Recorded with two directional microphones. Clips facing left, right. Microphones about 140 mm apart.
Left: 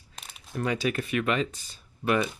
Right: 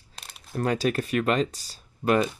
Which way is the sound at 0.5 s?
40° right (ahead or behind).